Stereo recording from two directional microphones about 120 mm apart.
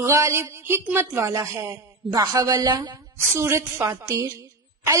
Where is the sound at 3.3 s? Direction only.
20° right (ahead or behind).